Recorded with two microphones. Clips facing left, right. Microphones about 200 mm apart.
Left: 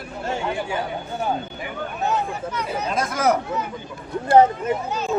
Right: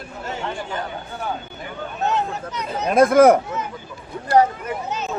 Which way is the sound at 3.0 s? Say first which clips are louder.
Right 10 dB; 55° right (ahead or behind).